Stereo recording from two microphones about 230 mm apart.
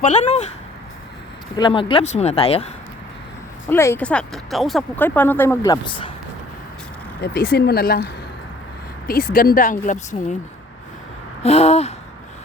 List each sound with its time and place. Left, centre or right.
0.0 s speech: left
1.5 s speech: left
3.7 s speech: centre
7.2 s speech: left
11.4 s a sound: left